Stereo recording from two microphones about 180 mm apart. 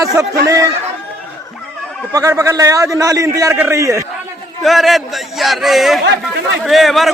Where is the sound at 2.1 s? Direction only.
20° right (ahead or behind).